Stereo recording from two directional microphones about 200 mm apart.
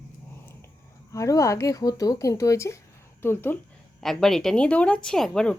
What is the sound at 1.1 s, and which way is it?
Speech, 15° left (ahead or behind).